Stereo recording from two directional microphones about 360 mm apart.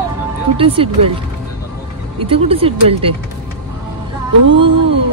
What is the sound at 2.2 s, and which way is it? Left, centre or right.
Speech, centre.